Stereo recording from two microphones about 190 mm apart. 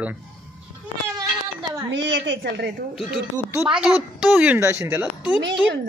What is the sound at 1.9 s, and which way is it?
Speech, 70° right (ahead or behind).